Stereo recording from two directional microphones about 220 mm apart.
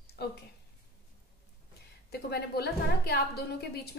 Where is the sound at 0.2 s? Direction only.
50° left (ahead or behind).